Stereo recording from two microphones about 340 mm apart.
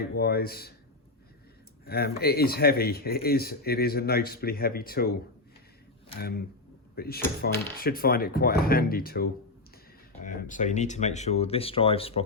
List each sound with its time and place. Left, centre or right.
0.0 s speech: left
1.8 s speech: left
6.9 s speech: left